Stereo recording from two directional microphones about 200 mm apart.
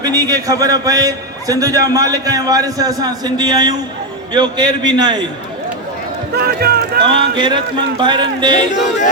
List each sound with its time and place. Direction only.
0.0 s a man's voice: 20° right (ahead or behind)
6.3 s speech: 50° right (ahead or behind)
7.3 s speech: 25° right (ahead or behind)